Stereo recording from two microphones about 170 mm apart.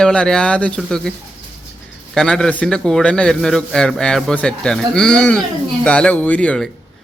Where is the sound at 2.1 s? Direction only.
5° left (ahead or behind).